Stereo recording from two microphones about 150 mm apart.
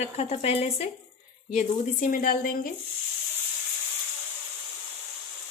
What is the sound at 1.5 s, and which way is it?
Speech, 60° left (ahead or behind).